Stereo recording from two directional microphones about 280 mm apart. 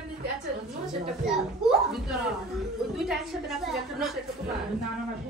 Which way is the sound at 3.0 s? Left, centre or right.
Centre.